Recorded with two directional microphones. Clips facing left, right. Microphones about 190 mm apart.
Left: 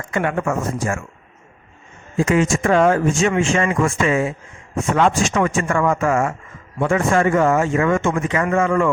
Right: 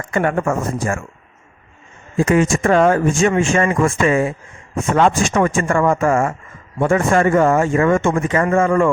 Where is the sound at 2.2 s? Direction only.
50° right (ahead or behind).